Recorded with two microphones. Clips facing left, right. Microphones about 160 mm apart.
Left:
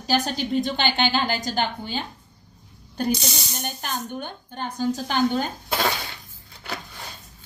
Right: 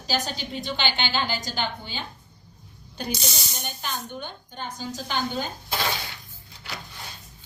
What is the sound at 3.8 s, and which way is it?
A woman's voice, 50° left (ahead or behind).